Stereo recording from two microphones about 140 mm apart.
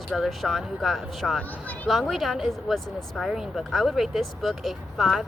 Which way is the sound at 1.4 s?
10° left (ahead or behind).